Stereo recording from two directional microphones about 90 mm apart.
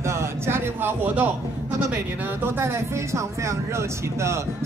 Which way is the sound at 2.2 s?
25° right (ahead or behind).